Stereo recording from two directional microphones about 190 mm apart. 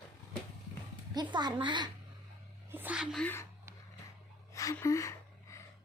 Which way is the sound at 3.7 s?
15° right (ahead or behind).